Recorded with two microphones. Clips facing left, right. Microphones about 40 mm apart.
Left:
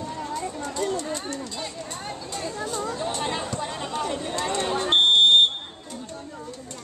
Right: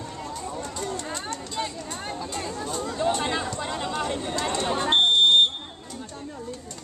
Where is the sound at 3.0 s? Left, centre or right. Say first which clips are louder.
Right 3 dB; right.